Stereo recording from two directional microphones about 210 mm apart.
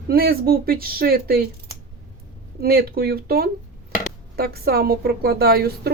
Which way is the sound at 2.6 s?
45° right (ahead or behind).